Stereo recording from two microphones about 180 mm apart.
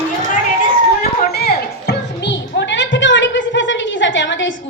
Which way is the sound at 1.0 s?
60° left (ahead or behind).